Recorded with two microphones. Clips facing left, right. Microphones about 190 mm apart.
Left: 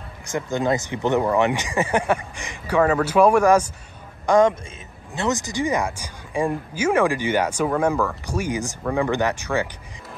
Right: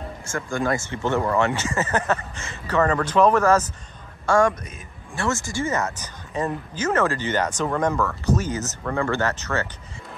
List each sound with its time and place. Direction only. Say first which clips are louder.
0.2 s a man's voice: left 3 dB; 20° left (ahead or behind)